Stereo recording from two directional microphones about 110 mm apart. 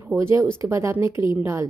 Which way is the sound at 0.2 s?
25° right (ahead or behind).